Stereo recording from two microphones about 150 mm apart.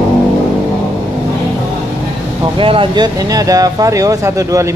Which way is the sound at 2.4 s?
35° right (ahead or behind).